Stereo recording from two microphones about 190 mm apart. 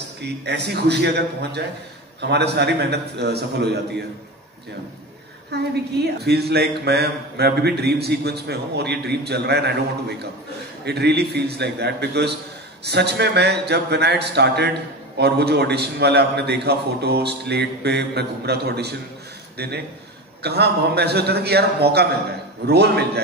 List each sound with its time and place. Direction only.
0.2 s speech: 60° right (ahead or behind)
5.5 s a man's voice: 60° right (ahead or behind)